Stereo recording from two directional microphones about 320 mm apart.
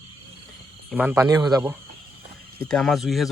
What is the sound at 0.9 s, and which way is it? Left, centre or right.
Speech, centre.